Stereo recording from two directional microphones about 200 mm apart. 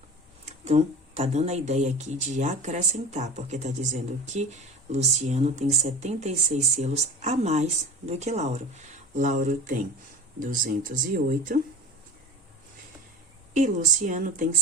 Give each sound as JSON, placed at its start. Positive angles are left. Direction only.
{"t": 0.4, "sound": "speech", "side_deg": -30}
{"t": 13.5, "sound": "speech", "side_deg": -40}